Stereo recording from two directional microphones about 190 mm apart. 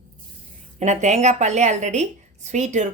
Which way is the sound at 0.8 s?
35° right (ahead or behind).